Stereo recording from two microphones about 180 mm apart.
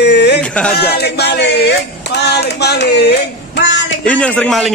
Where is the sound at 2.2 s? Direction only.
65° left (ahead or behind).